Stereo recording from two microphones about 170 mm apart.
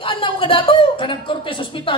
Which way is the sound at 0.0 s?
30° left (ahead or behind).